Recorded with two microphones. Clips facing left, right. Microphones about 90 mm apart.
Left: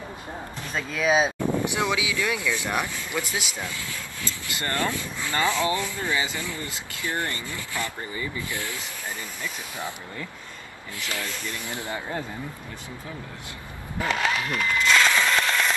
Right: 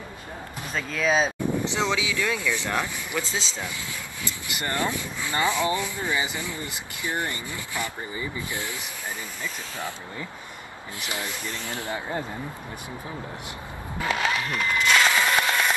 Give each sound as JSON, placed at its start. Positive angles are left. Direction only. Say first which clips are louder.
{"t": 0.7, "sound": "speech", "louder": "left 1 dB", "side_deg": 10}
{"t": 3.6, "sound": "speech", "louder": "even", "side_deg": -20}
{"t": 11.0, "sound": "speech", "louder": "even", "side_deg": -20}
{"t": 11.5, "sound": "speech", "louder": "right 1 dB", "side_deg": 20}
{"t": 14.0, "sound": "rub", "louder": "even", "side_deg": 0}